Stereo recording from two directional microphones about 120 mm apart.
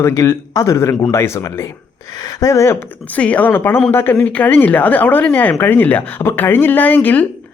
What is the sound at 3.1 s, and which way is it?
Speech, 10° left (ahead or behind).